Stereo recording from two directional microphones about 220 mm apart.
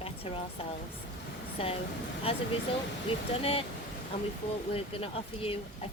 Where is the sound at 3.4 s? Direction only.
25° left (ahead or behind).